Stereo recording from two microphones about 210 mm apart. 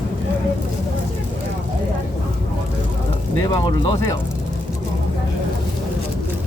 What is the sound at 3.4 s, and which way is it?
Speech, 15° left (ahead or behind).